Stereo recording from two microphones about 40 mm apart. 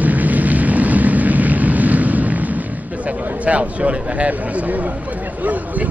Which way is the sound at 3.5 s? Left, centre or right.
Right.